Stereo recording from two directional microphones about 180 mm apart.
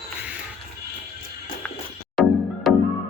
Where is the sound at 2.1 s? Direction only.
Centre (ahead or behind).